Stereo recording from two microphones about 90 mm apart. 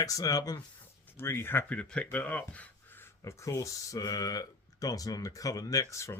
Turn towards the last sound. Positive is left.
turn(degrees=35)  # may be behind; listen again after turning